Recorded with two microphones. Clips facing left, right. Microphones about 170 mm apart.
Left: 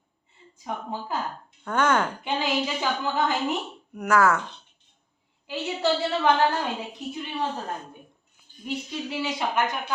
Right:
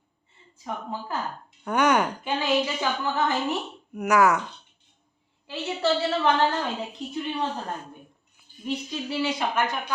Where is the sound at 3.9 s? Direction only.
10° right (ahead or behind).